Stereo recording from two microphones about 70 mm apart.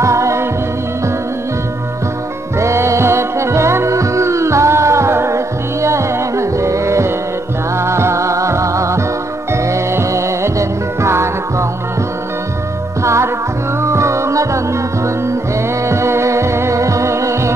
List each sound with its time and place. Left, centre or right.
0.0 s music: right
2.6 s music: right
13.0 s music: right
15.9 s music: right